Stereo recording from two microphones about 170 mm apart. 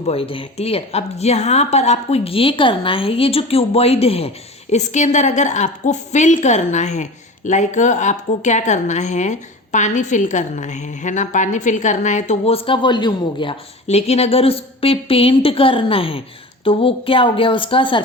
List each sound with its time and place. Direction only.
0.0 s a woman's voice: 35° left (ahead or behind)